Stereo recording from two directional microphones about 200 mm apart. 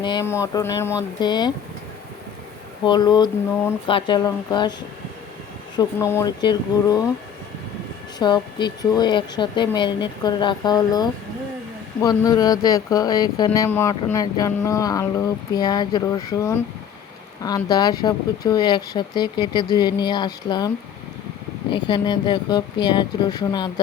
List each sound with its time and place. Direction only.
0.0 s speech: 20° left (ahead or behind)
2.8 s speech: 20° left (ahead or behind)
5.7 s speech: 15° left (ahead or behind)
8.2 s speech: 20° left (ahead or behind)